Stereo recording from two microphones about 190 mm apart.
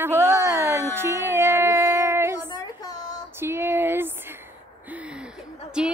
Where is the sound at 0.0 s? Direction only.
15° right (ahead or behind).